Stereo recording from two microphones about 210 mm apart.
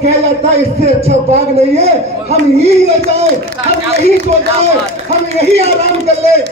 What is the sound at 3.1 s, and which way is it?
A man's voice, 30° right (ahead or behind).